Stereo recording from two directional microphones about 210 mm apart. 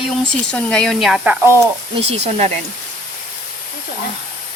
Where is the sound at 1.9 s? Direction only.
30° right (ahead or behind).